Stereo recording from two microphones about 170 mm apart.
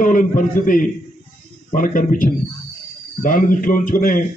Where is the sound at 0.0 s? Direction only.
50° left (ahead or behind).